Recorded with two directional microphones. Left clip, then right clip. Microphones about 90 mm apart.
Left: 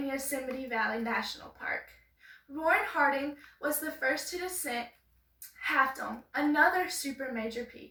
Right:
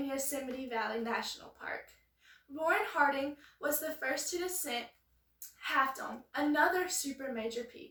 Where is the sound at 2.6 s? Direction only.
40° right (ahead or behind).